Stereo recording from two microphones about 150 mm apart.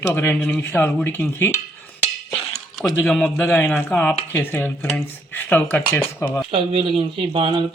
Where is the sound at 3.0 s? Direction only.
10° left (ahead or behind).